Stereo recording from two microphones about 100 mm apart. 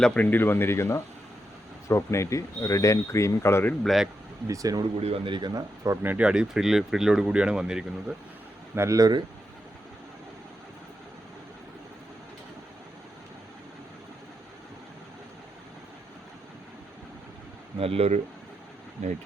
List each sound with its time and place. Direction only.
0.0 s speech: 15° left (ahead or behind)
3.8 s speech: centre (ahead or behind)
4.4 s speech: 35° right (ahead or behind)
4.8 s speech: 75° right (ahead or behind)
5.3 s speech: 50° right (ahead or behind)
5.8 s speech: 25° right (ahead or behind); by 8.1 s 10° right (ahead or behind)
8.7 s speech: 25° right (ahead or behind)
9.0 s speech: 45° right (ahead or behind)
17.7 s speech: 80° right